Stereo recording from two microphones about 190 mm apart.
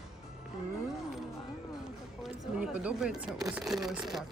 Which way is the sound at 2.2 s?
5° right (ahead or behind).